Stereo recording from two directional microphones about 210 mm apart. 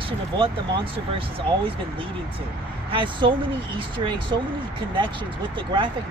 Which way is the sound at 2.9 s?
25° right (ahead or behind).